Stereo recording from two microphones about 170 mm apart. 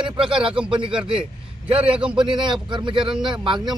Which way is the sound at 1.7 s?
35° right (ahead or behind).